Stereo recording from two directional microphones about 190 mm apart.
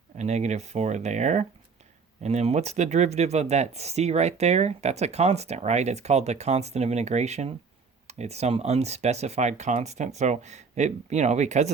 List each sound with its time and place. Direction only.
0.2 s speech: 35° right (ahead or behind)